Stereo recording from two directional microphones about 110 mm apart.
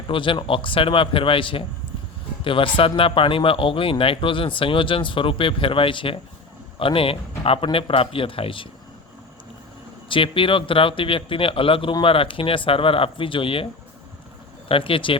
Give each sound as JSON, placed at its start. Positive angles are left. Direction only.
{"t": 0.1, "sound": "a man's voice", "side_deg": 50}
{"t": 10.1, "sound": "a man's voice", "side_deg": 55}
{"t": 14.7, "sound": "speech", "side_deg": 55}